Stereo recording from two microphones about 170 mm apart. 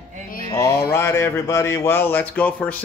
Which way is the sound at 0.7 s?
65° left (ahead or behind).